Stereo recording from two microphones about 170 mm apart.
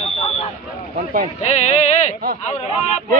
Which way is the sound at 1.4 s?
40° left (ahead or behind).